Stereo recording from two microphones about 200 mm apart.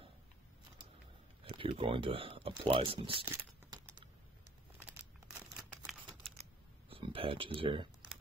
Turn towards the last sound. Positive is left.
turn(degrees=-25)  # may be behind; listen again after turning